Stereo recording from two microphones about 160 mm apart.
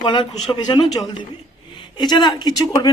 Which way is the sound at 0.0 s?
30° left (ahead or behind).